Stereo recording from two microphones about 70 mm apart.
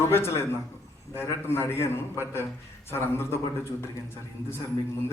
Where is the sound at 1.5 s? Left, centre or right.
Left.